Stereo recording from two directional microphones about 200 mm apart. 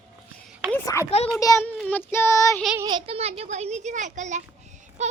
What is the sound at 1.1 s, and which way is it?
Speech, 30° left (ahead or behind).